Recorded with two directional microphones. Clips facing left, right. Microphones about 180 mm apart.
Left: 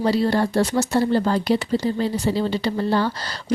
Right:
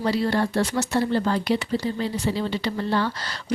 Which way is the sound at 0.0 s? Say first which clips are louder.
Left 3 dB; 35° left (ahead or behind).